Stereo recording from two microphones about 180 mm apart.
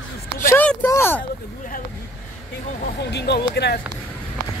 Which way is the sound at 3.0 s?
70° left (ahead or behind).